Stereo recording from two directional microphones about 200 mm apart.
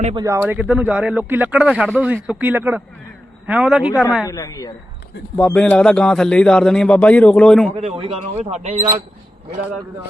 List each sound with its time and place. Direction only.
0.1 s speech: 20° right (ahead or behind)
0.4 s a man's voice: 10° right (ahead or behind)
4.3 s speech: 15° left (ahead or behind)
5.5 s a man's voice: 5° left (ahead or behind)
7.8 s a man's voice: 30° right (ahead or behind)